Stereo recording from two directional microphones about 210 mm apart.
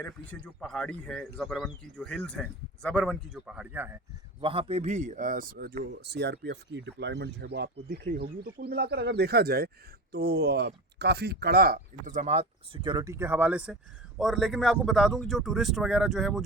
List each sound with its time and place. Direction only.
0.0 s speech: 5° left (ahead or behind); by 4.0 s 10° right (ahead or behind)
4.4 s speech: 25° right (ahead or behind); by 16.4 s centre (ahead or behind)